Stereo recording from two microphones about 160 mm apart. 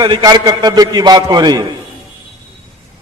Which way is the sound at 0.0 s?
25° right (ahead or behind).